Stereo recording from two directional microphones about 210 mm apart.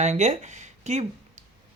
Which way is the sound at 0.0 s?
30° right (ahead or behind).